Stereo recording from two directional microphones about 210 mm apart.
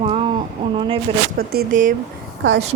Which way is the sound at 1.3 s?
45° right (ahead or behind).